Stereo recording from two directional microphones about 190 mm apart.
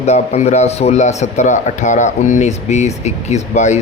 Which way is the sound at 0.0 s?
35° left (ahead or behind).